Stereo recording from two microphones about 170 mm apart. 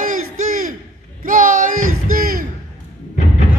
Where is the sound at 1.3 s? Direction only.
50° right (ahead or behind).